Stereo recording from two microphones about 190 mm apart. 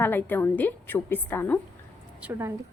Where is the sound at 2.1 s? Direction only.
5° right (ahead or behind).